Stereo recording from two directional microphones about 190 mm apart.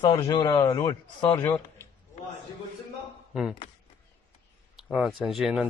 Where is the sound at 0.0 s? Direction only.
25° left (ahead or behind).